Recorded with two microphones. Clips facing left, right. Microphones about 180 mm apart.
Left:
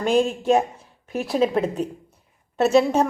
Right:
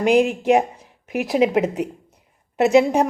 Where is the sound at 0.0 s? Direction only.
15° right (ahead or behind).